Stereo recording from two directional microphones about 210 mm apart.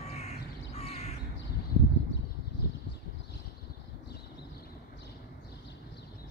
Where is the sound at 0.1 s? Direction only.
30° left (ahead or behind).